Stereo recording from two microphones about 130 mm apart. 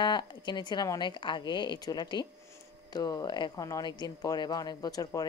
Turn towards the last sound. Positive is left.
turn(degrees=30)  # may be behind; listen again after turning